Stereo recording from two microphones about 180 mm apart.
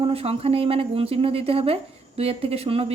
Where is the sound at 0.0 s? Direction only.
35° right (ahead or behind).